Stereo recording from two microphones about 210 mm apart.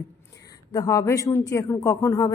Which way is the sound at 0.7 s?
15° left (ahead or behind).